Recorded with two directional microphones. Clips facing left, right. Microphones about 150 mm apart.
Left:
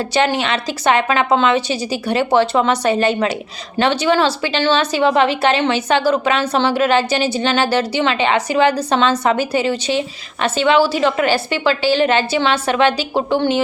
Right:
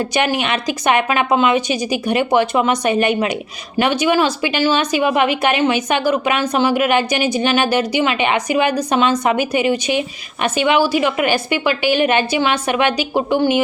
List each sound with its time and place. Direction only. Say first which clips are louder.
0.1 s a woman's voice: left 1 dB; 15° right (ahead or behind)